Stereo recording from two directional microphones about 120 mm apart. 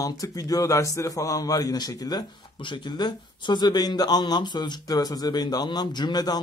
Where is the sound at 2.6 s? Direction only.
40° left (ahead or behind).